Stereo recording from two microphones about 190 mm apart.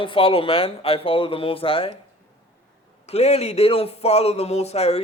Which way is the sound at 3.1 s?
35° left (ahead or behind).